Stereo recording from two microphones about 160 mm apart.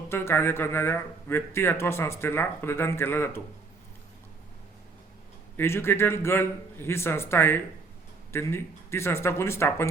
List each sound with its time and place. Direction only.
0.1 s a man's voice: 15° left (ahead or behind)
5.5 s a man's voice: 15° left (ahead or behind)